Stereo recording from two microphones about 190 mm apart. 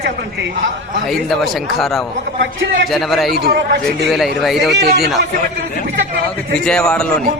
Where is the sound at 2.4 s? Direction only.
75° right (ahead or behind).